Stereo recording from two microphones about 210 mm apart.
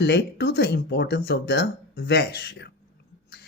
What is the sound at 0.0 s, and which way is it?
Speech, 55° left (ahead or behind).